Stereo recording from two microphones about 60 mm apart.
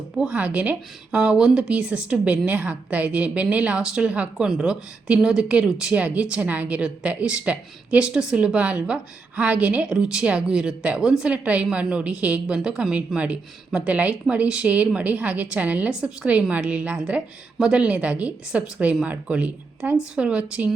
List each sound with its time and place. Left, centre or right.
0.3 s a woman's voice: right